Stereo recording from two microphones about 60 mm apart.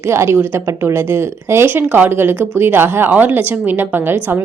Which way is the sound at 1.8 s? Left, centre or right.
Right.